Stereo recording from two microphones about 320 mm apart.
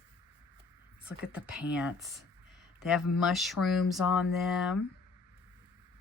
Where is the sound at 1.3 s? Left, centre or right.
Centre.